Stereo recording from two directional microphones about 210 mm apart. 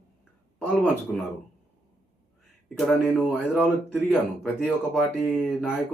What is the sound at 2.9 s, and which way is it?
Speech, 10° left (ahead or behind).